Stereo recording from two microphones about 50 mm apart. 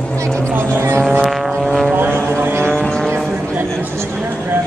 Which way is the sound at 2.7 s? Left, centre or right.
Centre.